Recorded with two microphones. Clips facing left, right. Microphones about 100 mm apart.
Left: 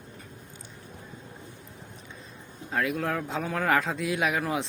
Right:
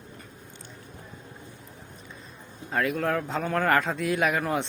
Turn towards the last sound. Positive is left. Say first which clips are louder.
# right 2 dB
turn(degrees=0)  # may be behind; listen again after turning